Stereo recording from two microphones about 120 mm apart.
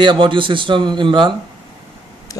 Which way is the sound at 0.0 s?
40° right (ahead or behind).